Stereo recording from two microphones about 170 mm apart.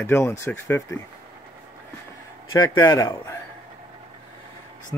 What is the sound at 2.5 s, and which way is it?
Speech, 20° left (ahead or behind).